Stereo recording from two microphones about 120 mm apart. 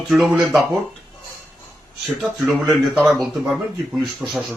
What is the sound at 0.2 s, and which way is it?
Speech, 10° right (ahead or behind).